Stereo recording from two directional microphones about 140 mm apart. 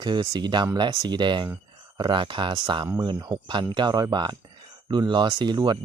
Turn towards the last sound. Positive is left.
turn(degrees=-30)  # may be behind; listen again after turning